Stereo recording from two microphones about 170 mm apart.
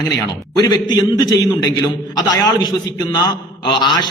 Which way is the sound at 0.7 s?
25° left (ahead or behind).